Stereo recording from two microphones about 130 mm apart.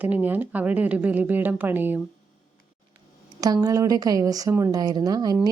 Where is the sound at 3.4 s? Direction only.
30° right (ahead or behind).